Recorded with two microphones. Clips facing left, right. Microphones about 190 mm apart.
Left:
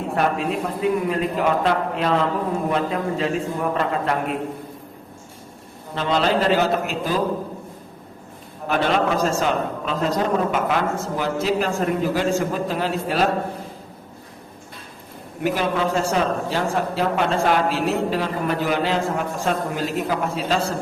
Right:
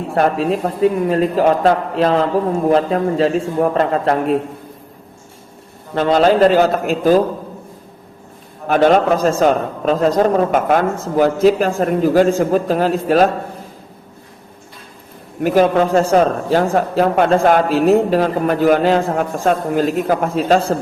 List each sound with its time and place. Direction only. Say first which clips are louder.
0.1 s a man's voice: right 7 dB; 40° right (ahead or behind)
5.9 s a man's voice: right 8 dB; 50° right (ahead or behind)
8.6 s a man's voice: right 8 dB; 45° right (ahead or behind)
15.4 s a man's voice: right 8 dB; 45° right (ahead or behind)